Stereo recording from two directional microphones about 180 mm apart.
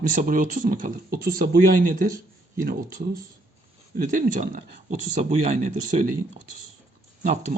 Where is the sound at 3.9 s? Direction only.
50° right (ahead or behind).